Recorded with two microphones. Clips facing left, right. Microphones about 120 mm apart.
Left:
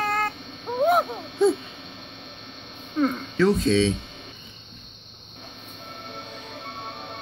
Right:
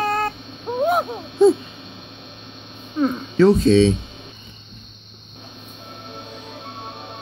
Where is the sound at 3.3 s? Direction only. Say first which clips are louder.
Right 7 dB; 35° right (ahead or behind).